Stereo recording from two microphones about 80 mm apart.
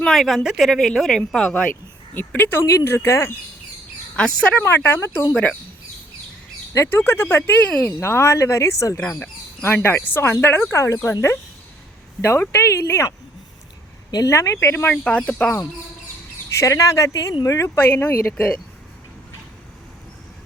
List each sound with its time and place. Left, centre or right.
0.0 s speech: centre
2.1 s speech: left
4.1 s speech: centre
4.5 s speech: left
6.7 s speech: left
7.7 s speech: centre
7.9 s speech: left
9.1 s bird: centre
9.6 s speech: left
14.3 s speech: left
14.8 s speech: centre
16.6 s speech: left
17.7 s speech: left